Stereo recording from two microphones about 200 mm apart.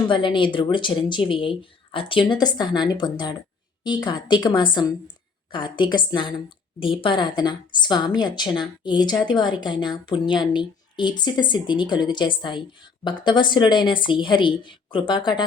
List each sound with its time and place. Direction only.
0.1 s a woman's voice: 25° left (ahead or behind)